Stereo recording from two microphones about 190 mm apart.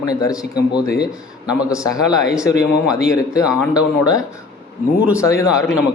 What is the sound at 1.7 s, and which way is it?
Speech, 20° left (ahead or behind).